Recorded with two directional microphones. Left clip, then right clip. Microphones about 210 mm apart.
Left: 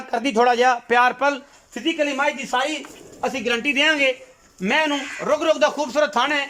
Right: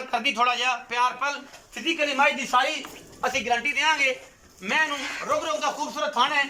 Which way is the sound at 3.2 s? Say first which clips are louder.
Left 2 dB; 40° left (ahead or behind).